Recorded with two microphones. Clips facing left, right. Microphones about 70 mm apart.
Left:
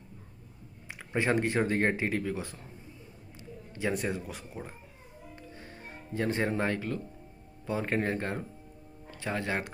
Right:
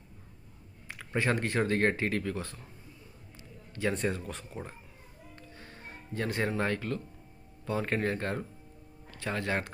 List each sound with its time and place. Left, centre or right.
0.9 s speech: centre
3.7 s speech: centre
5.4 s music: centre
7.6 s speech: centre